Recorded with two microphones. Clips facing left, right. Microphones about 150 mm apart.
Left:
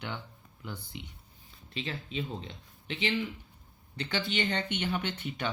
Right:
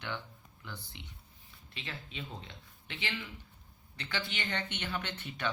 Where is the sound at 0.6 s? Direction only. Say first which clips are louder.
Left 6 dB; 15° left (ahead or behind).